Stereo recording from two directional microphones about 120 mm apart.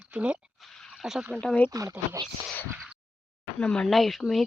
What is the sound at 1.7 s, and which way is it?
Speech, 25° right (ahead or behind).